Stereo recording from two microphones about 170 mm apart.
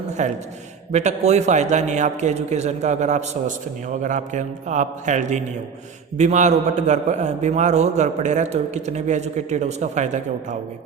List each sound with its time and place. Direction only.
0.2 s a man's voice: 45° right (ahead or behind)